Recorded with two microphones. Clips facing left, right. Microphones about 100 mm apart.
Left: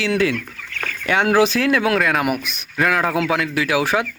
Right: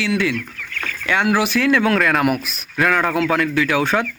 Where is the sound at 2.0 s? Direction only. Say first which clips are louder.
Right 2 dB; 5° left (ahead or behind).